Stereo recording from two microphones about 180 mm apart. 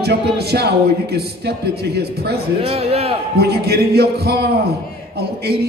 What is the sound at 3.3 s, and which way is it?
A man's voice, 65° right (ahead or behind).